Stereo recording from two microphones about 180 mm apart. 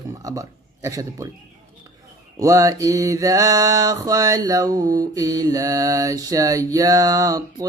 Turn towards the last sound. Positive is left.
turn(degrees=-20)  # may be behind; listen again after turning